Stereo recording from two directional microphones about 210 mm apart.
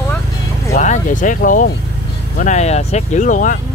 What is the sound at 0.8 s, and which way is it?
Speech, 35° left (ahead or behind).